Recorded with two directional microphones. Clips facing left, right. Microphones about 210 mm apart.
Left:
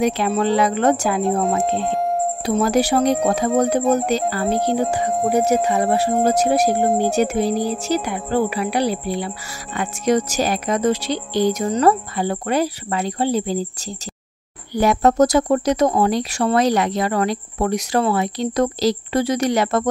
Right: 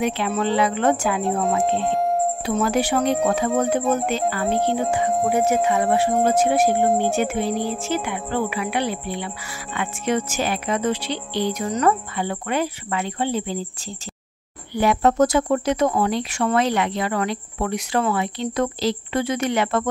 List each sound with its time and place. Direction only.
0.0 s speech: 40° left (ahead or behind)
1.6 s speech: centre (ahead or behind)
2.4 s speech: 40° left (ahead or behind)
14.7 s speech: 40° left (ahead or behind)